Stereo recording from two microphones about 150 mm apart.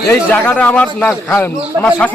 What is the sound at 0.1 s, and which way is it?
A man's voice, 10° left (ahead or behind).